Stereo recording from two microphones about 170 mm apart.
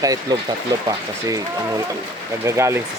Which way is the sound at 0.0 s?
20° right (ahead or behind).